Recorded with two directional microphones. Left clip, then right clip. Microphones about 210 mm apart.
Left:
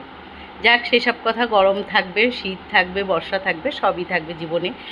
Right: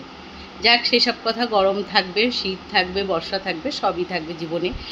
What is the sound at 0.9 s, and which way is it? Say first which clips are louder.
A man's voice: left 1 dB; 10° right (ahead or behind).